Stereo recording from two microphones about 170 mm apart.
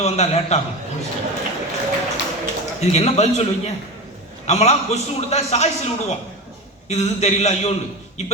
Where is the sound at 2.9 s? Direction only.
40° left (ahead or behind).